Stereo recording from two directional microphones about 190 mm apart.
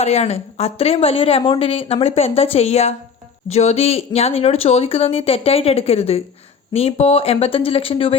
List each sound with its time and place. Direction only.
0.0 s speech: 35° left (ahead or behind)